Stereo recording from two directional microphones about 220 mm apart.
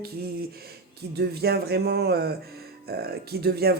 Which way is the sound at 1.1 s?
45° right (ahead or behind).